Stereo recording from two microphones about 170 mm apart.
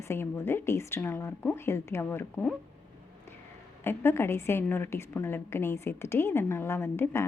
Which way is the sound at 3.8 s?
15° left (ahead or behind).